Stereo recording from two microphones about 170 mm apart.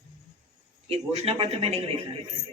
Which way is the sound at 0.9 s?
35° right (ahead or behind).